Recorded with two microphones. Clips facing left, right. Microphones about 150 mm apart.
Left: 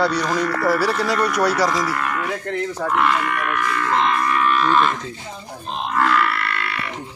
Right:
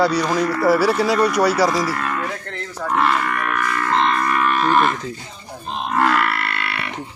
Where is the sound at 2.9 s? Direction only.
35° right (ahead or behind).